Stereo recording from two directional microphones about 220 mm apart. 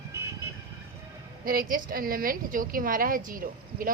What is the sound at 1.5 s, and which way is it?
A woman's voice, 40° right (ahead or behind).